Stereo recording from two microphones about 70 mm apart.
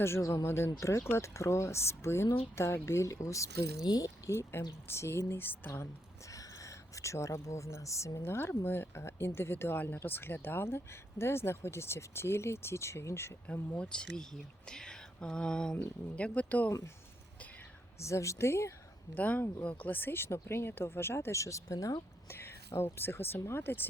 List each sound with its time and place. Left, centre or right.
0.0 s speech: left
0.4 s speech: left
3.8 s speech: left
4.3 s speech: left
6.3 s speech: left
13.5 s speech: centre
18.0 s speech: left
19.1 s speech: left
22.3 s speech: left